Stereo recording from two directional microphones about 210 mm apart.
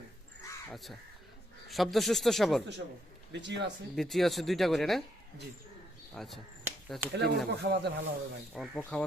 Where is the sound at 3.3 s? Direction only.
55° right (ahead or behind).